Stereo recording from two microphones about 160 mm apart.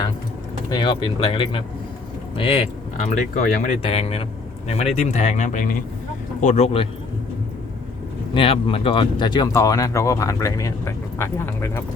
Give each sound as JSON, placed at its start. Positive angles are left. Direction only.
{"t": 0.7, "sound": "speech", "side_deg": 30}
{"t": 3.3, "sound": "speech", "side_deg": 50}
{"t": 3.8, "sound": "speech", "side_deg": 35}
{"t": 8.3, "sound": "speech", "side_deg": 30}